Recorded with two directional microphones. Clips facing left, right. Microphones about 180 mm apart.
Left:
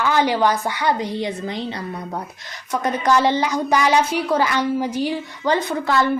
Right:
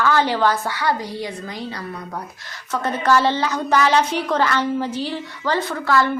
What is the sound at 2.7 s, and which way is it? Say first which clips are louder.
A woman's voice: even; 15° left (ahead or behind).